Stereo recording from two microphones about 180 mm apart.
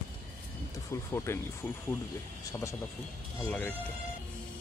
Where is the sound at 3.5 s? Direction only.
5° left (ahead or behind).